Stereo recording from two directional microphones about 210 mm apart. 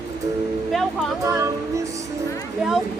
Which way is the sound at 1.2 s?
15° right (ahead or behind).